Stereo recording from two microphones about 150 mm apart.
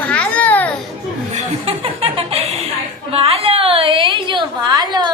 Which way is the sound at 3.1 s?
40° right (ahead or behind).